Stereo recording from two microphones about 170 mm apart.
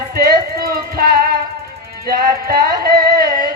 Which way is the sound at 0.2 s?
60° right (ahead or behind).